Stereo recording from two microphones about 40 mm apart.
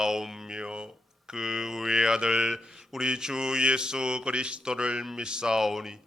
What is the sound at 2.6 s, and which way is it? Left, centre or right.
Mantra, centre.